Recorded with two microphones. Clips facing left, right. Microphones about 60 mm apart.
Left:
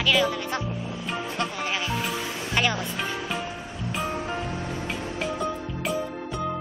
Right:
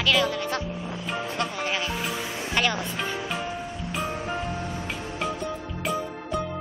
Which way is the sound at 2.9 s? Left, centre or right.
Centre.